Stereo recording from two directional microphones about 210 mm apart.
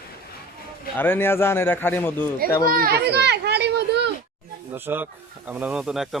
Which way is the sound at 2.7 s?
45° right (ahead or behind).